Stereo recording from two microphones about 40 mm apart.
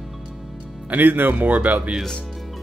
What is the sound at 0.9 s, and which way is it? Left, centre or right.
Speech, right.